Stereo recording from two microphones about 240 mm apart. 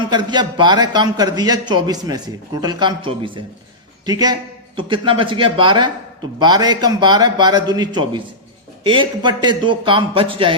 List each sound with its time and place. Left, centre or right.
0.1 s a man's voice: centre